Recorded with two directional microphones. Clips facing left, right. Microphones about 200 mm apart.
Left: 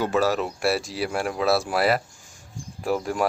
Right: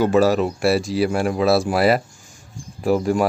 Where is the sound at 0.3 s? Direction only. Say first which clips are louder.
Right 6 dB; centre (ahead or behind).